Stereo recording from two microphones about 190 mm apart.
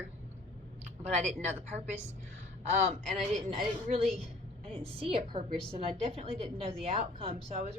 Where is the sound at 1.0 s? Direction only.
35° right (ahead or behind).